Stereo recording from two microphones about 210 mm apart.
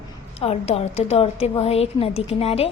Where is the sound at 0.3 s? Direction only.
30° left (ahead or behind).